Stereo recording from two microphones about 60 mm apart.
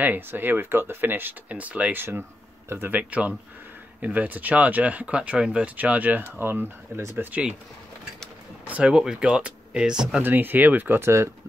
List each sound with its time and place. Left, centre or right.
0.0 s speech: right
2.0 s speech: right
3.0 s speech: right
7.0 s speech: right
7.2 s speech: right
8.6 s speech: right
8.9 s speech: centre
10.2 s speech: right
11.0 s speech: right